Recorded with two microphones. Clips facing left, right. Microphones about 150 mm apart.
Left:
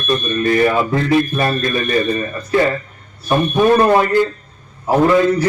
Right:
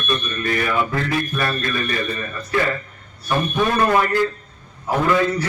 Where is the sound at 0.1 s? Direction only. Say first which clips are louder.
Left 8 dB; 30° left (ahead or behind).